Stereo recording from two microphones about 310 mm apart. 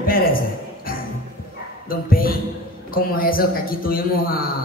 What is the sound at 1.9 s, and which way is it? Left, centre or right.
A man's voice, left.